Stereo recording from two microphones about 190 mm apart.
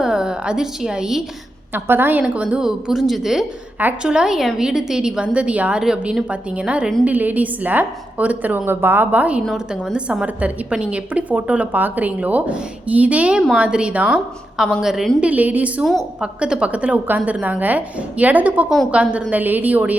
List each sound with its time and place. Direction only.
0.0 s a woman's voice: 5° right (ahead or behind)